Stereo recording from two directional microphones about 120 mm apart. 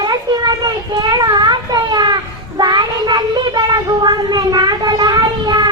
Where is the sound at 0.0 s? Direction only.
35° right (ahead or behind).